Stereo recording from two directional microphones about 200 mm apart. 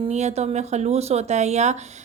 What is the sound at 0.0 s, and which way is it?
A woman's voice, 35° right (ahead or behind).